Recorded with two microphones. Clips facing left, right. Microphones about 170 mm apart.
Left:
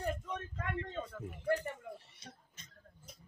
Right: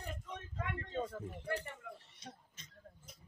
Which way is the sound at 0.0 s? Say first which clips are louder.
Left 8 dB; 55° left (ahead or behind).